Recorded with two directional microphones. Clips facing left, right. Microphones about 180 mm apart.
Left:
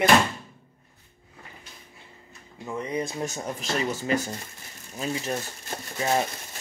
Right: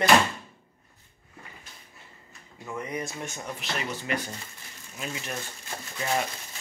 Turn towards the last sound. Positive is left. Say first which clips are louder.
# left 4 dB
turn(degrees=35)  # may be behind; listen again after turning